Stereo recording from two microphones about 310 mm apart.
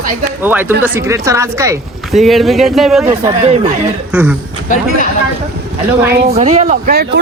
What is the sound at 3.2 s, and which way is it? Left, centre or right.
Speech, centre.